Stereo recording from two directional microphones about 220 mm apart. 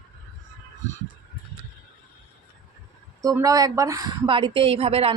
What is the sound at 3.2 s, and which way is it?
A woman's voice, 15° right (ahead or behind).